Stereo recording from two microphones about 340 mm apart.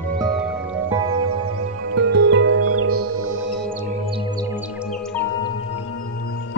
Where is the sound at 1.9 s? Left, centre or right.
Right.